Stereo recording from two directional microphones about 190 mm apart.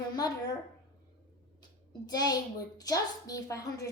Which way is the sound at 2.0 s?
20° left (ahead or behind).